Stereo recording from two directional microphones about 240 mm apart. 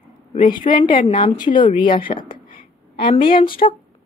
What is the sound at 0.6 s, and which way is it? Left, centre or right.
Speech, left.